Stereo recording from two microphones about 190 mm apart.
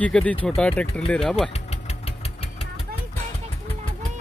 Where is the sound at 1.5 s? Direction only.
35° left (ahead or behind).